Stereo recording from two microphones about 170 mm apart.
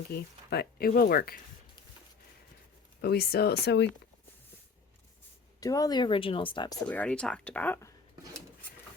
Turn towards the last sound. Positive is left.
turn(degrees=15)  # may be behind; listen again after turning